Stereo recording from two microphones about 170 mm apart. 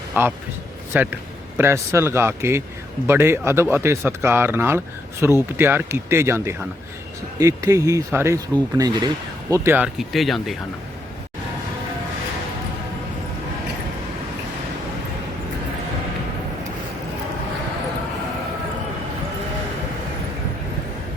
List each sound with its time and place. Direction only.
0.1 s a man's voice: 10° right (ahead or behind)